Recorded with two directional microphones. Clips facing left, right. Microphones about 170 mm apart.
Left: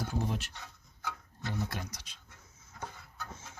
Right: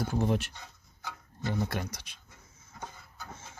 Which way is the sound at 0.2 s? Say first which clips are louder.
Right 8 dB; 55° right (ahead or behind).